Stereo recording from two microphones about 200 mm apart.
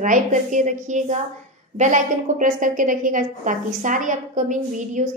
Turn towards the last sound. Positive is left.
turn(degrees=-40)  # may be behind; listen again after turning